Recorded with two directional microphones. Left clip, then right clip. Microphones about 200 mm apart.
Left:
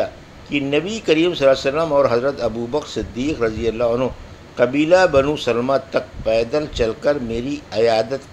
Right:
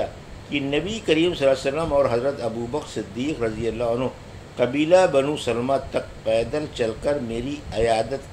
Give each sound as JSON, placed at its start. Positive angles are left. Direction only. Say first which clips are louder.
{"t": 0.0, "sound": "speech", "louder": "left 5 dB", "side_deg": 25}